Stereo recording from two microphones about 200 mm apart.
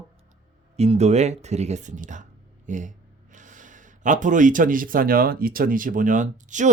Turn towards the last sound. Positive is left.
turn(degrees=-40)  # may be behind; listen again after turning